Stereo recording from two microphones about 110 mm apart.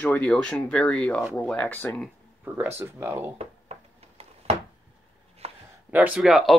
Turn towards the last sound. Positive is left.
turn(degrees=0)  # may be behind; listen again after turning